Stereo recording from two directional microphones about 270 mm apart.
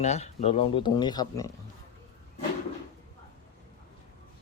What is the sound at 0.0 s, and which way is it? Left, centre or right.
Speech, left.